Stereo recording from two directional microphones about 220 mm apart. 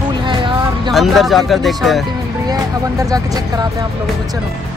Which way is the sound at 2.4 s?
15° right (ahead or behind).